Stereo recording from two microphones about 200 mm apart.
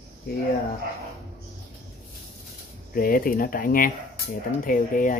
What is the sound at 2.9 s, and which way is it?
Speech, 45° left (ahead or behind).